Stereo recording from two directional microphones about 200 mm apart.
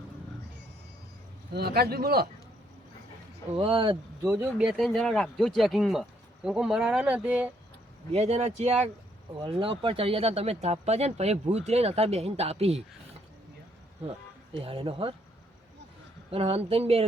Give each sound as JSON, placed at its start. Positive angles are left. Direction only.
{"t": 1.5, "sound": "speech", "side_deg": -50}
{"t": 3.5, "sound": "speech", "side_deg": -30}
{"t": 4.2, "sound": "speech", "side_deg": -10}
{"t": 8.1, "sound": "speech", "side_deg": -30}
{"t": 14.6, "sound": "speech", "side_deg": -30}
{"t": 16.3, "sound": "speech", "side_deg": -30}